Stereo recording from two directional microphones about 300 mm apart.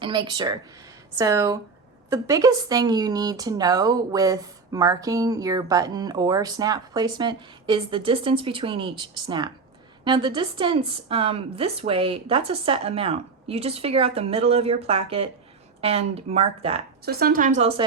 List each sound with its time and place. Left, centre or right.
0.0 s a woman's voice: centre
17.1 s a woman's voice: right